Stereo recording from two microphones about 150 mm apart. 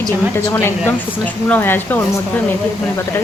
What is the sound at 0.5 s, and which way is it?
Speech, 15° left (ahead or behind).